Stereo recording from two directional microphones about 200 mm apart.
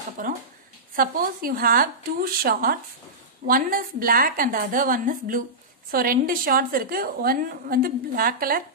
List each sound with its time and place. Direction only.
0.2 s a woman's voice: 45° right (ahead or behind)